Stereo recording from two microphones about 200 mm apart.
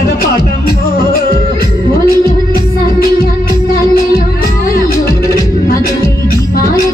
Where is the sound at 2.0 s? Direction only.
45° left (ahead or behind).